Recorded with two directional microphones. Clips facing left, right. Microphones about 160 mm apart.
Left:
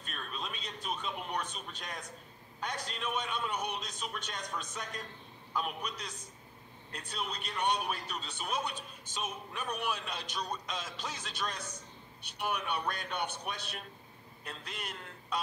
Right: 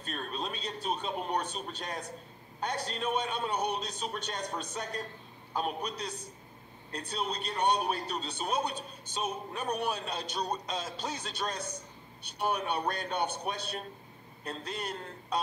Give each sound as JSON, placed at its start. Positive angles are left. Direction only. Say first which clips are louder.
{"t": 0.0, "sound": "a man's voice", "louder": "right 5 dB", "side_deg": -35}